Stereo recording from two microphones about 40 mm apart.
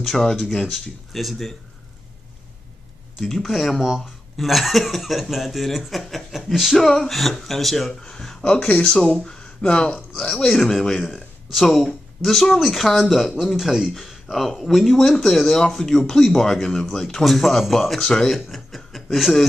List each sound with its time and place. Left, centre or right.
0.0 s speech: centre
3.2 s speech: centre; by 9.9 s left
9.9 s speech: centre
15.0 s speech: centre
18.3 s speech: centre